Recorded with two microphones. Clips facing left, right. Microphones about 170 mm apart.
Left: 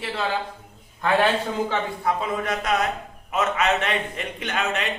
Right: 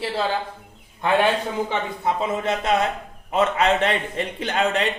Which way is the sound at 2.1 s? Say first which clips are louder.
Right 3 dB; 25° right (ahead or behind).